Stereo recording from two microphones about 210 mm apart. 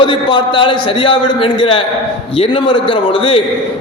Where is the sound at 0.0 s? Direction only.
25° left (ahead or behind).